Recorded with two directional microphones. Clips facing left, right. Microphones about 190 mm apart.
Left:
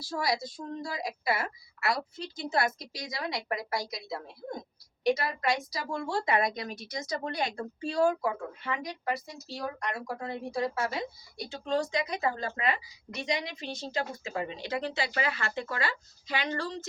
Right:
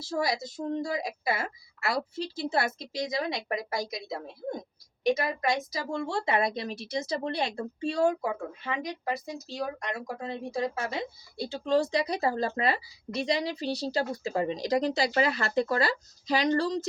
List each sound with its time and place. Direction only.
0.0 s a woman's voice: 25° right (ahead or behind)
11.3 s a woman's voice: 35° right (ahead or behind)